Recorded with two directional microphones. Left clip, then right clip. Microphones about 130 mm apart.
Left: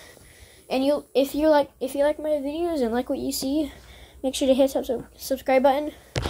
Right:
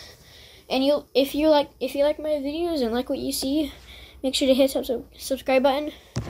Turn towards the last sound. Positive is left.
turn(degrees=5)  # may be behind; listen again after turning